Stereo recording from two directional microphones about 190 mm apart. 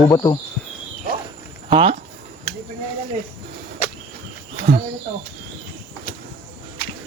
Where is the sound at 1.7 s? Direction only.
25° right (ahead or behind).